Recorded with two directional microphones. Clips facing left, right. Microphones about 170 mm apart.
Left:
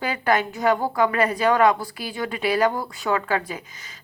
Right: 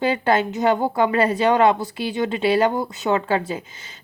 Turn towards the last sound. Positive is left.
turn(degrees=-25)  # may be behind; listen again after turning